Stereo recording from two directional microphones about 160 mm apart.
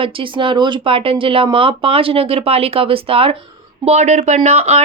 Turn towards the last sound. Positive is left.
turn(degrees=-40)  # may be behind; listen again after turning